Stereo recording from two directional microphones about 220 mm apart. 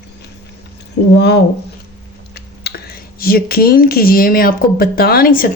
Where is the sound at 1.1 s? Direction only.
50° left (ahead or behind).